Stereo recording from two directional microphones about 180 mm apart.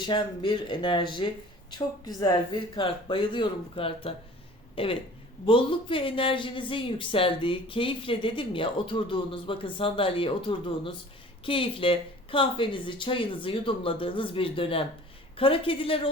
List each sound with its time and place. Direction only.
0.0 s a woman's voice: 25° left (ahead or behind)